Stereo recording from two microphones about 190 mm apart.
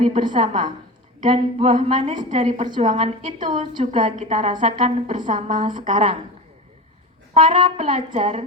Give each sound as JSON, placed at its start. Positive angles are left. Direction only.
{"t": 0.0, "sound": "a woman's voice", "side_deg": -30}
{"t": 3.4, "sound": "a woman's voice", "side_deg": -25}
{"t": 7.6, "sound": "a woman's voice", "side_deg": -30}